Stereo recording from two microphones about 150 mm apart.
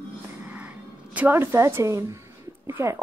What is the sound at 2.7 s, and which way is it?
Speech, 15° right (ahead or behind).